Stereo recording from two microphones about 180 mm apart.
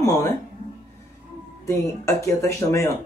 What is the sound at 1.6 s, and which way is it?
Speech, 15° left (ahead or behind).